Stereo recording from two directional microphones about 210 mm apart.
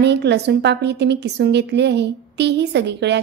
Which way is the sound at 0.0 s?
55° right (ahead or behind).